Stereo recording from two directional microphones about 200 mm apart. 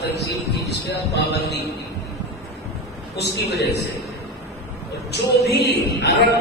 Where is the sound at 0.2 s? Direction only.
60° left (ahead or behind).